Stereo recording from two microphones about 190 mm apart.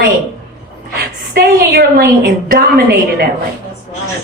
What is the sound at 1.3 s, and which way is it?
A woman's voice, 55° right (ahead or behind).